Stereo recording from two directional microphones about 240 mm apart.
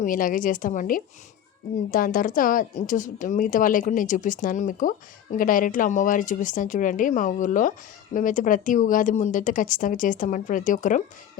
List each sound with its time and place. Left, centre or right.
0.0 s a woman's voice: left